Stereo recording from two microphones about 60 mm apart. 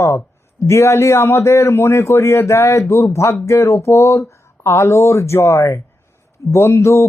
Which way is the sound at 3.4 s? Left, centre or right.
Left.